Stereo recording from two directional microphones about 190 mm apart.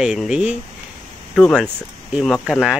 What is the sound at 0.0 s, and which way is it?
Speech, 5° right (ahead or behind).